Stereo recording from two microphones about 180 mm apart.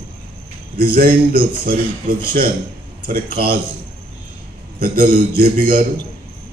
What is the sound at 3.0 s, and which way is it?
Speech, 55° right (ahead or behind).